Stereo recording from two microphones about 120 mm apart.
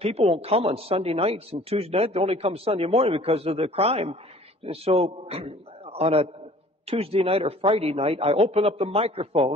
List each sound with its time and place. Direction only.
0.0 s a man's voice: 60° right (ahead or behind)